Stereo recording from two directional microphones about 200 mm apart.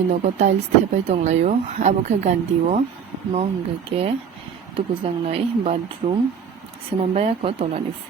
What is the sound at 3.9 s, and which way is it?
Speech, 30° right (ahead or behind).